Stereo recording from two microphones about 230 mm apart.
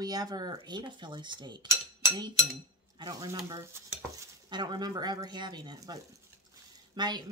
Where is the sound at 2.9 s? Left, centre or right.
Centre.